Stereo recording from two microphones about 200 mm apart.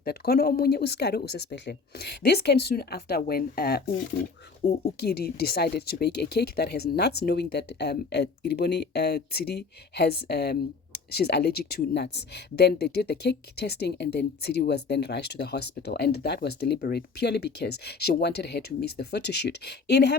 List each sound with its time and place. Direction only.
0.0 s speech: 50° left (ahead or behind)